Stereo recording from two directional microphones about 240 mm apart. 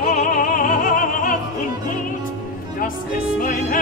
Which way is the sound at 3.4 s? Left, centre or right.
Left.